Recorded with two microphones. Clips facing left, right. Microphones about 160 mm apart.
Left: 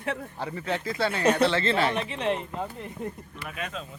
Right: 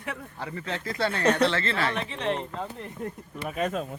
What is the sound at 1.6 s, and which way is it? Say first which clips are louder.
A man's voice: left 3 dB; 25° left (ahead or behind).